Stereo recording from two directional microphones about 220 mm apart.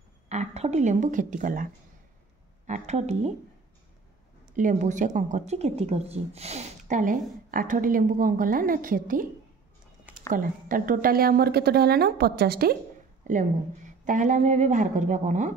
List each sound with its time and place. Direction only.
0.3 s a woman's voice: 30° right (ahead or behind)
4.6 s speech: 35° right (ahead or behind)
10.3 s a woman's voice: 40° right (ahead or behind)